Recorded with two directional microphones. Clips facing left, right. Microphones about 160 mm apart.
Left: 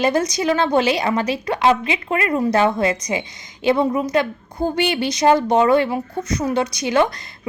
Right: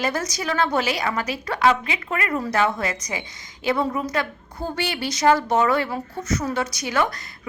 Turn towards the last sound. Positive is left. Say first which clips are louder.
# left 6 dB
turn(degrees=20)  # may be behind; listen again after turning